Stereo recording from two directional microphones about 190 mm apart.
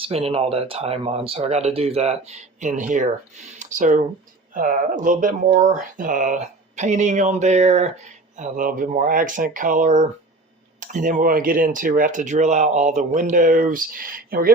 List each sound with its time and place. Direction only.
0.0 s speech: 30° right (ahead or behind); by 14.5 s 50° right (ahead or behind)